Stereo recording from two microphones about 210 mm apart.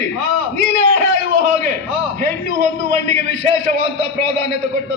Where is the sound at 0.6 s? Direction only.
50° left (ahead or behind).